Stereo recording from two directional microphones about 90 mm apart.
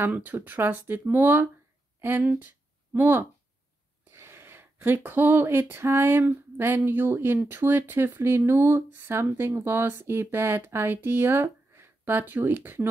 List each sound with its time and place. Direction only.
0.0 s a woman's voice: 20° right (ahead or behind)